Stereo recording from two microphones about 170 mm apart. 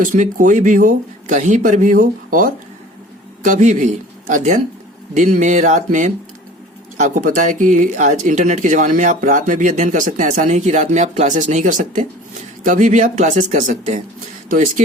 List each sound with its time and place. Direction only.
0.0 s speech: 50° right (ahead or behind)